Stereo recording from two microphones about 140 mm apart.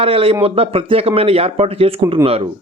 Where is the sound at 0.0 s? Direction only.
40° right (ahead or behind).